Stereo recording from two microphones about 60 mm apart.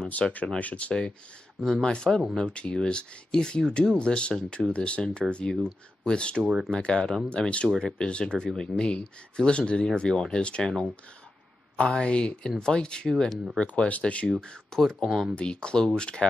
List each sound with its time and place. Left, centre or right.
0.1 s speech: left
6.4 s speech: centre
6.7 s speech: centre